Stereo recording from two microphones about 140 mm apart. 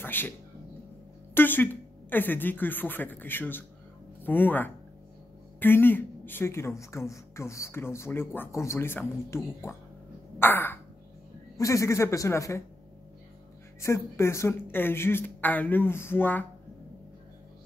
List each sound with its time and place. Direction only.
0.0 s speech: 15° left (ahead or behind)
1.3 s speech: 15° left (ahead or behind)
13.7 s speech: 20° left (ahead or behind)